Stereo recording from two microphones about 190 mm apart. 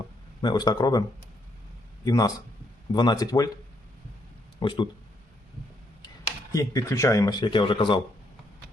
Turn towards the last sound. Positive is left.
turn(degrees=25)  # may be behind; listen again after turning